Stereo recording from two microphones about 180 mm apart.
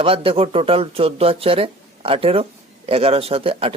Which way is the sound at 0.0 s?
30° right (ahead or behind).